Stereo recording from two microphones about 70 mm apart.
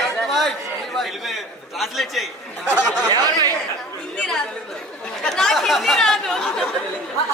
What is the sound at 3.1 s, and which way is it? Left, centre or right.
Speech, right.